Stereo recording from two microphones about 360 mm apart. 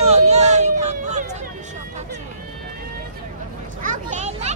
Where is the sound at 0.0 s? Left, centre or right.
Centre.